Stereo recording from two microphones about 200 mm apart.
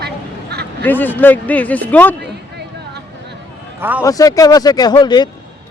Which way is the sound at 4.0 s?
15° left (ahead or behind).